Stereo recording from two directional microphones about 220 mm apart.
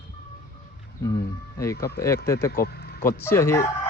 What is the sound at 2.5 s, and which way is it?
Vehicle, 45° left (ahead or behind).